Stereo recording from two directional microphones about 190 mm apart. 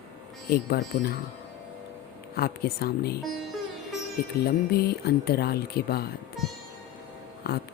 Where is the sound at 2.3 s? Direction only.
55° left (ahead or behind).